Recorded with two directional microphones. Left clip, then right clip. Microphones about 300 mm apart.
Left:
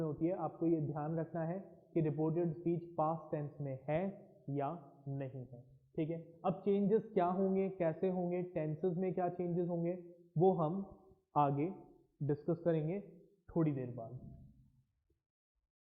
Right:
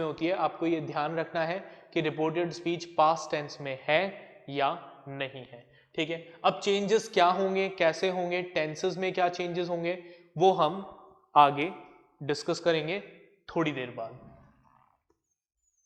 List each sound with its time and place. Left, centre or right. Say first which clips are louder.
0.0 s a man's voice: right 9 dB; centre
10.3 s a man's voice: right 8 dB; right
10.8 s a sound: right 7 dB; centre
11.3 s a man's voice: right 12 dB; centre